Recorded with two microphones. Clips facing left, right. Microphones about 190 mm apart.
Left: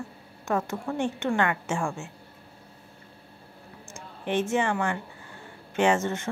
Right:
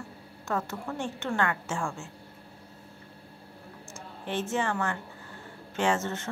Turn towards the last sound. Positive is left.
turn(degrees=15)  # may be behind; listen again after turning